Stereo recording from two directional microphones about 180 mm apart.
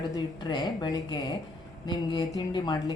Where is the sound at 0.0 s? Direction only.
20° left (ahead or behind).